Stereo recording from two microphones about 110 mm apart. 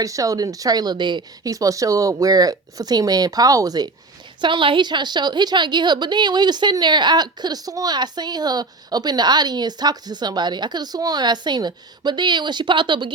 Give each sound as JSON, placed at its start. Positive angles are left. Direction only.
{"t": 0.0, "sound": "a woman's voice", "side_deg": -30}
{"t": 1.5, "sound": "a woman's voice", "side_deg": -30}
{"t": 4.4, "sound": "a woman's voice", "side_deg": -45}